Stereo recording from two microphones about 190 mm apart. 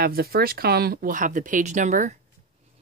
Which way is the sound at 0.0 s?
55° right (ahead or behind).